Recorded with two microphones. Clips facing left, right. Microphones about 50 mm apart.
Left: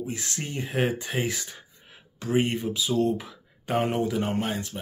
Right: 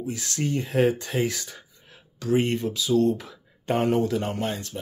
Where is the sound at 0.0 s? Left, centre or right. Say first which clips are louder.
Right 4 dB; left.